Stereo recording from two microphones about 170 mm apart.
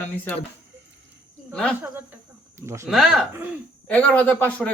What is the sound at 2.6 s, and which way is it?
Speech, 15° right (ahead or behind).